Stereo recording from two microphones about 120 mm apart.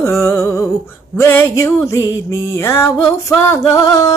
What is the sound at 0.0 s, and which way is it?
Music, 25° left (ahead or behind).